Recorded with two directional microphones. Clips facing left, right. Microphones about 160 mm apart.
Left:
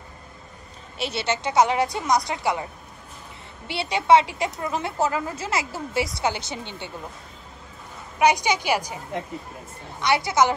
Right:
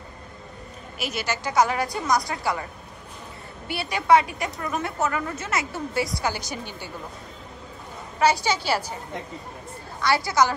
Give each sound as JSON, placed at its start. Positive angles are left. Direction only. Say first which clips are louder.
{"t": 0.9, "sound": "a woman's voice", "louder": "left 3 dB", "side_deg": 30}
{"t": 3.6, "sound": "a woman's voice", "louder": "left 2 dB", "side_deg": 25}
{"t": 8.2, "sound": "a woman's voice", "louder": "left 1 dB", "side_deg": 15}
{"t": 9.9, "sound": "a woman's voice", "louder": "left 1 dB", "side_deg": 20}